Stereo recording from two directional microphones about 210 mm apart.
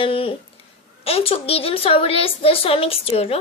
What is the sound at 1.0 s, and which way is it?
A woman's voice, 30° left (ahead or behind).